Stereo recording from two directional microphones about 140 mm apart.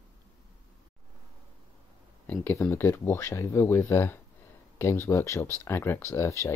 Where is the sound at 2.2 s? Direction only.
15° left (ahead or behind).